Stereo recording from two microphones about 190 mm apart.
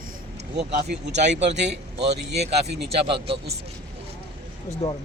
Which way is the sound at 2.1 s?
60° right (ahead or behind).